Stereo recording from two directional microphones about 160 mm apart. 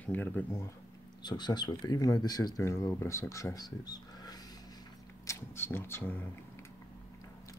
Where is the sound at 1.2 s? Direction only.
25° left (ahead or behind); by 6.3 s 10° left (ahead or behind).